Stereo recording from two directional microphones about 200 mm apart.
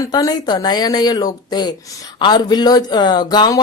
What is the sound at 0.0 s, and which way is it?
Speech, 20° left (ahead or behind).